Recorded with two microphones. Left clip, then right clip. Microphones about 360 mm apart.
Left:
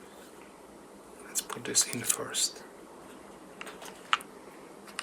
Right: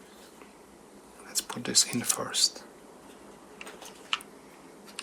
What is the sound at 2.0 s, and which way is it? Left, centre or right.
Speech, centre.